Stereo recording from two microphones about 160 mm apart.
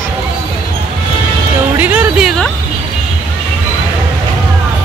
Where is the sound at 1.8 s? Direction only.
10° right (ahead or behind).